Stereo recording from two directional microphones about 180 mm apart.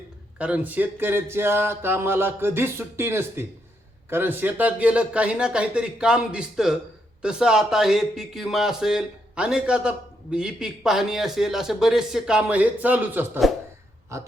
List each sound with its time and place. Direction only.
0.3 s a man's voice: 5° right (ahead or behind)